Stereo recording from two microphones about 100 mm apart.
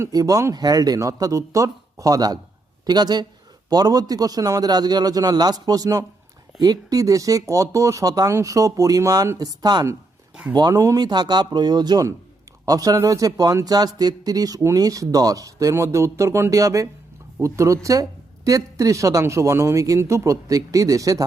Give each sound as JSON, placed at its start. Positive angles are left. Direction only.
{"t": 0.0, "sound": "speech", "side_deg": -35}